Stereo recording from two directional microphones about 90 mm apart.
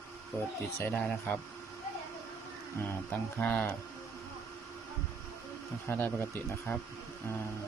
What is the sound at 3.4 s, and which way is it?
Speech, 15° left (ahead or behind).